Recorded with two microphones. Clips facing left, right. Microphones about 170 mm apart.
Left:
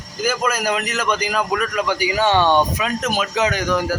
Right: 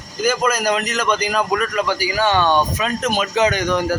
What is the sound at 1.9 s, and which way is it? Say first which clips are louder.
Speech: left 3 dB; 20° left (ahead or behind).